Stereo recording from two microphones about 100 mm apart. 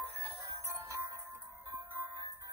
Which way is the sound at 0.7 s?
25° right (ahead or behind).